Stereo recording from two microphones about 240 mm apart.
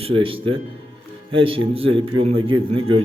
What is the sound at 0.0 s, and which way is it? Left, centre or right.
A man's voice, right.